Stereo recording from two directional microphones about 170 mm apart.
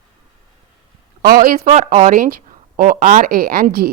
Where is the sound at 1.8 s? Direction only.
50° right (ahead or behind).